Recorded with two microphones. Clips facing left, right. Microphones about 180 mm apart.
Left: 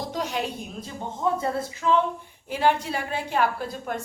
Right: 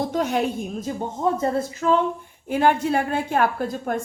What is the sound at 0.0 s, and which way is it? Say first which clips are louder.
A woman's voice: right 6 dB; 55° right (ahead or behind).